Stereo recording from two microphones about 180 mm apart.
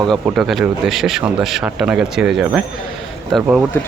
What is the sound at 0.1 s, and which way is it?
Speech, centre (ahead or behind).